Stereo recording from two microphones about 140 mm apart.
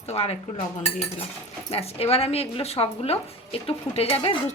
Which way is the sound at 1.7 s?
45° left (ahead or behind).